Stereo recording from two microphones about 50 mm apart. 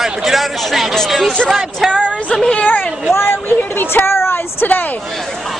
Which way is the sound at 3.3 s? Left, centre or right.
Left.